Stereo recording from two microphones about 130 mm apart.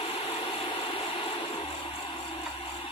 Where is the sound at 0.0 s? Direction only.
50° left (ahead or behind).